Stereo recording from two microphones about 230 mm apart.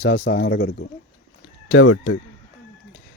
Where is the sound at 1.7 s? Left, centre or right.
Left.